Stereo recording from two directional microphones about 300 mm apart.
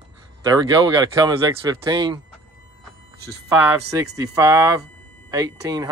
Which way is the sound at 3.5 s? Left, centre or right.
Centre.